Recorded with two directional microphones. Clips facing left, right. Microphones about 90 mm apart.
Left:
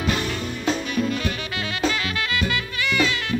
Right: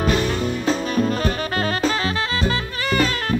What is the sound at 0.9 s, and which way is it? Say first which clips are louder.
Music: right 4 dB; 40° right (ahead or behind).